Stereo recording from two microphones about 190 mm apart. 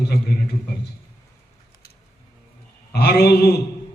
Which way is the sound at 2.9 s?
55° left (ahead or behind).